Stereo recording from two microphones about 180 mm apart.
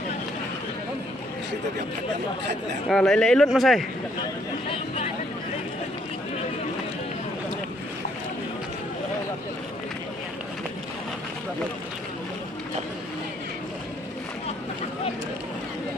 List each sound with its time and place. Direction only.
2.9 s speech: 5° left (ahead or behind)
4.6 s chatter: 30° left (ahead or behind)